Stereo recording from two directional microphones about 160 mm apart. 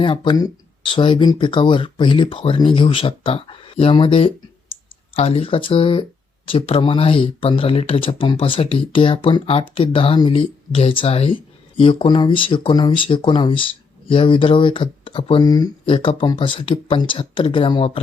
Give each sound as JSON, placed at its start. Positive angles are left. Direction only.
{"t": 0.0, "sound": "speech", "side_deg": 30}